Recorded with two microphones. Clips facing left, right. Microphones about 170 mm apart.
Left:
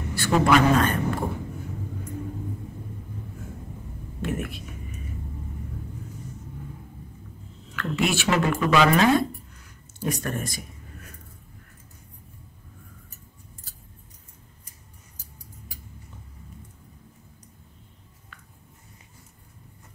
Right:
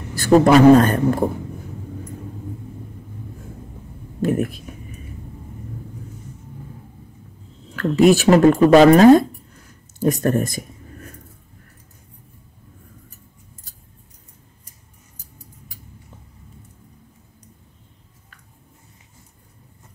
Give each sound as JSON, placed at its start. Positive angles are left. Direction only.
{"t": 0.1, "sound": "speech", "side_deg": -40}
{"t": 4.2, "sound": "speech", "side_deg": -40}
{"t": 7.7, "sound": "speech", "side_deg": -40}